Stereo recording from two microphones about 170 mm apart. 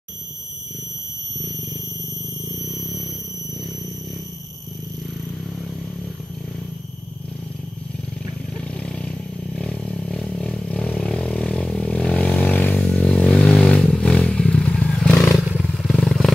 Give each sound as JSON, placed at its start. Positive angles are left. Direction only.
{"t": 8.7, "sound": "vehicle", "side_deg": 5}
{"t": 15.3, "sound": "motorcycle", "side_deg": -5}